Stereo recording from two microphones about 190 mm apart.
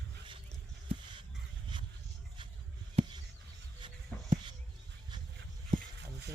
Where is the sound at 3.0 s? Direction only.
25° right (ahead or behind).